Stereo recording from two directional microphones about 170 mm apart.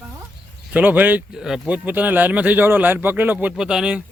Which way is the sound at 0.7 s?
10° right (ahead or behind).